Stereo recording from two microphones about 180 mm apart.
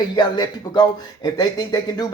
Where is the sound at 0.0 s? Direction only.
25° left (ahead or behind).